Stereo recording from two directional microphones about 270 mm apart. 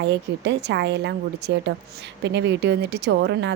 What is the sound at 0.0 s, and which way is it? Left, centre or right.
A woman's voice, right.